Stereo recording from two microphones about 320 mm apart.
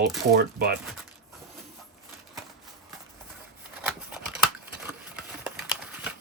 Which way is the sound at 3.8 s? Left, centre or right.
Centre.